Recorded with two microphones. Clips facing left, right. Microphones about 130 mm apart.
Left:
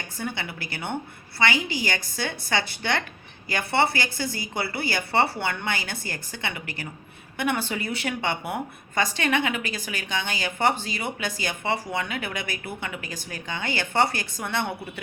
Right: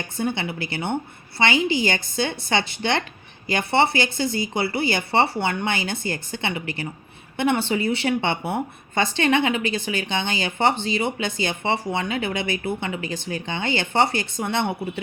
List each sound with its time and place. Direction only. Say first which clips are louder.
0.2 s a woman's voice: right 7 dB; 25° right (ahead or behind)